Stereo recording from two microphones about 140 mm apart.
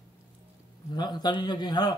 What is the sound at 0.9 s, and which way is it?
A man's voice, 30° left (ahead or behind).